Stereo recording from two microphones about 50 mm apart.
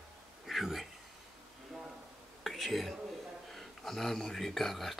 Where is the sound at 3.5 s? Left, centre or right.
Centre.